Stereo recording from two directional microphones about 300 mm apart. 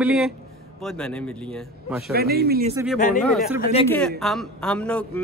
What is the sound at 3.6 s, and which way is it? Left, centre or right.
Speech, centre.